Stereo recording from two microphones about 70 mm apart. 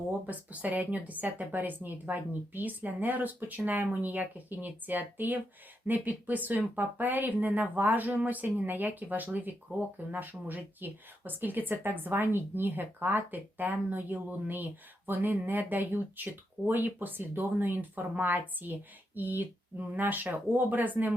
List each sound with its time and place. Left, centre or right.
0.3 s speech: right